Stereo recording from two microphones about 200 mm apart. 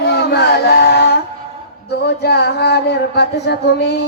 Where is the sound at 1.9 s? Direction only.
55° left (ahead or behind).